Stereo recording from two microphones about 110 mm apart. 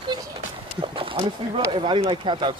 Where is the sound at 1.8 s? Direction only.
50° right (ahead or behind).